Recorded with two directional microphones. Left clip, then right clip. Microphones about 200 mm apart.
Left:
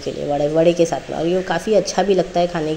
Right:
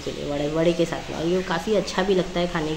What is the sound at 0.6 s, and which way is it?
A woman's voice, 20° left (ahead or behind).